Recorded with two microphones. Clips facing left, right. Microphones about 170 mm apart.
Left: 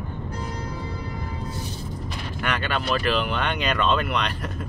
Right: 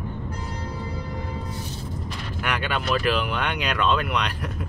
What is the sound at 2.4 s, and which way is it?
Speech, 10° right (ahead or behind).